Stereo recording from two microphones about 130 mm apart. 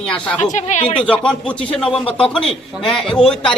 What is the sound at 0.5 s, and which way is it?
Speech, 70° left (ahead or behind).